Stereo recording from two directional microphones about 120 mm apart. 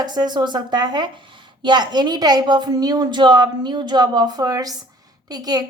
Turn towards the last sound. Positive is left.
turn(degrees=-35)  # may be behind; listen again after turning